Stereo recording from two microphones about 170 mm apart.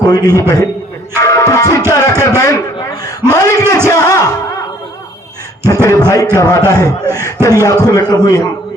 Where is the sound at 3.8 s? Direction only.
20° left (ahead or behind).